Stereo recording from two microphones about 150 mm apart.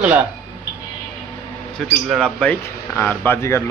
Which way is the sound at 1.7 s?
5° left (ahead or behind).